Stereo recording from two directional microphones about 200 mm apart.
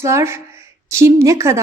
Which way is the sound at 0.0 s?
15° right (ahead or behind).